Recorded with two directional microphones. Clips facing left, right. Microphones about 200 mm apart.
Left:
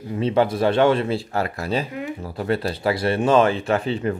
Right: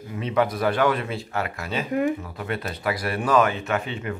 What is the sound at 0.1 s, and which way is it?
Speech, 30° left (ahead or behind).